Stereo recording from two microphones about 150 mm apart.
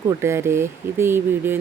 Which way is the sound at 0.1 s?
15° right (ahead or behind).